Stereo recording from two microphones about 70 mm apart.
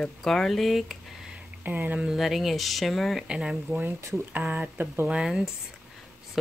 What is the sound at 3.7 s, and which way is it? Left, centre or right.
Speech, right.